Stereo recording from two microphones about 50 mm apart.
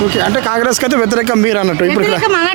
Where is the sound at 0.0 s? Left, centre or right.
Right.